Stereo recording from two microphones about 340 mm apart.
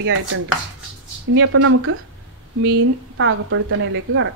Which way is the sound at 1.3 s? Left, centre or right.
Right.